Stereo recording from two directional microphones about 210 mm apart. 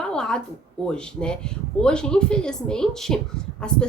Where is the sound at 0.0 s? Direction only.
5° left (ahead or behind).